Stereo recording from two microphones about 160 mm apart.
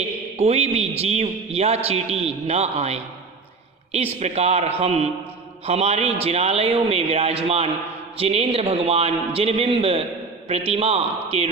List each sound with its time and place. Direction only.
0.3 s a man's voice: 40° right (ahead or behind)